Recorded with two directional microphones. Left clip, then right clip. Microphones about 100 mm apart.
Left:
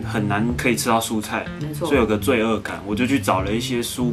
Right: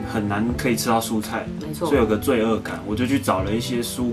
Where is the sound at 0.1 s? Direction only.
15° left (ahead or behind).